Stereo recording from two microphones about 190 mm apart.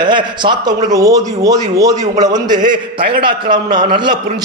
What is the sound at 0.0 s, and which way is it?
Speech, 25° right (ahead or behind).